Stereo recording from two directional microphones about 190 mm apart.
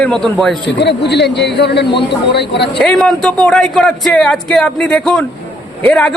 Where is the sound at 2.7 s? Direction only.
5° left (ahead or behind).